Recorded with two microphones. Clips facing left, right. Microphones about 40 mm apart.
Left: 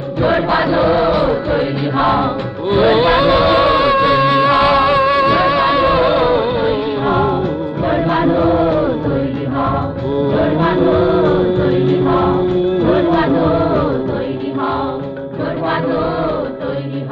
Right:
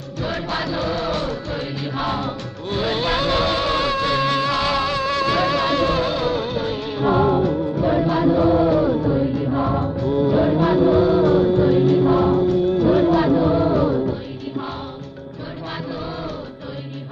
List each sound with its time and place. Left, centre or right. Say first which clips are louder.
0.2 s music: left 11 dB; left
7.8 s chant: left 4 dB; left
10.3 s music: left 4 dB; left
15.6 s chant: left 12 dB; left